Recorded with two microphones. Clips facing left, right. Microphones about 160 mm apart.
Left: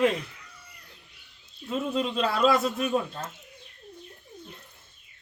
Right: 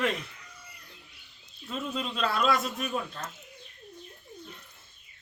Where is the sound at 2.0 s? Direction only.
30° left (ahead or behind).